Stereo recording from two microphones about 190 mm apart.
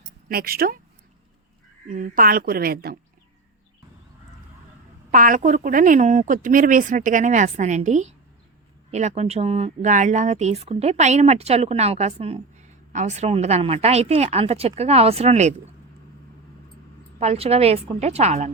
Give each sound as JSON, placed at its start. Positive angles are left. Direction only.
{"t": 0.3, "sound": "speech", "side_deg": -50}
{"t": 1.9, "sound": "speech", "side_deg": -45}
{"t": 5.1, "sound": "speech", "side_deg": -45}
{"t": 17.2, "sound": "speech", "side_deg": -35}